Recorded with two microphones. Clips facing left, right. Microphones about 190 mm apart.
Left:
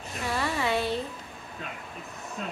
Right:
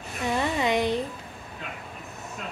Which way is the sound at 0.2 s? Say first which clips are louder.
Right 4 dB; 20° right (ahead or behind).